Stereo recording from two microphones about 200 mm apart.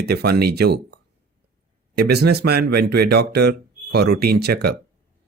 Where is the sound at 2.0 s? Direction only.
55° right (ahead or behind).